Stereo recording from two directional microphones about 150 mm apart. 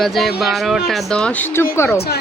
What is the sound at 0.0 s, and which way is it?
Speech, centre (ahead or behind).